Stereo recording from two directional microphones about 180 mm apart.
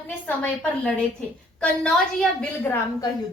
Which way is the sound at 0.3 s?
10° left (ahead or behind).